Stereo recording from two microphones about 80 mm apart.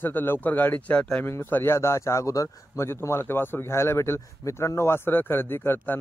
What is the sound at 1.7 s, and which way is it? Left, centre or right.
Speech, left.